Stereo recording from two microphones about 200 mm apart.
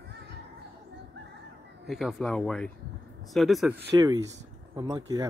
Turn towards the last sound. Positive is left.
turn(degrees=-20)  # may be behind; listen again after turning